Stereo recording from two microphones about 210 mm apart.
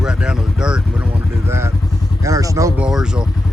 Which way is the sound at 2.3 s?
15° right (ahead or behind).